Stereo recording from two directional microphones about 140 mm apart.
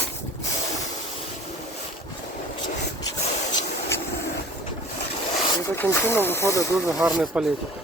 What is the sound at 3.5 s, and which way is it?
Spray, 20° left (ahead or behind).